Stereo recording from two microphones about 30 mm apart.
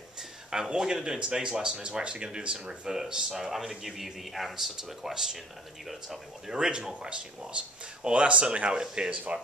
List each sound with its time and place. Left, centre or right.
0.5 s speech: right
1.4 s speech: right
3.1 s speech: right
3.5 s speech: centre
6.5 s speech: right
6.9 s speech: right